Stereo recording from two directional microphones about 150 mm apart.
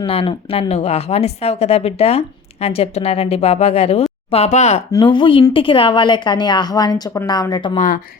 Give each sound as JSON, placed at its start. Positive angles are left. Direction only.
{"t": 0.0, "sound": "speech", "side_deg": 40}
{"t": 4.9, "sound": "a woman's voice", "side_deg": 30}